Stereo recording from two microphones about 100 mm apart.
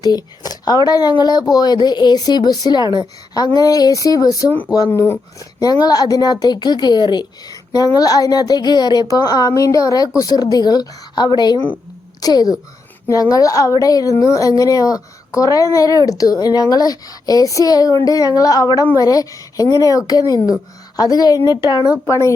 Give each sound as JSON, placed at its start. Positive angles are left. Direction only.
{"t": 0.0, "sound": "a woman's voice", "side_deg": 40}
{"t": 4.9, "sound": "speech", "side_deg": 20}
{"t": 5.8, "sound": "a woman's voice", "side_deg": 40}
{"t": 22.0, "sound": "speech", "side_deg": 30}